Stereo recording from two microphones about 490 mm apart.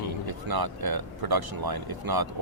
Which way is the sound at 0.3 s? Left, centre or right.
Right.